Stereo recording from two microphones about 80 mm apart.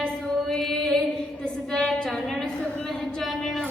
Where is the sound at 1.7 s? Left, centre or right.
Centre.